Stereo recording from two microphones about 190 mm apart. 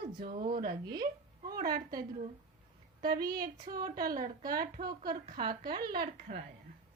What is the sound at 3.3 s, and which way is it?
Speech, 50° right (ahead or behind).